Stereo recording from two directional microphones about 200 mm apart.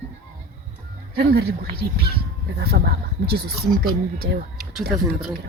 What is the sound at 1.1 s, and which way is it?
Speech, 50° right (ahead or behind).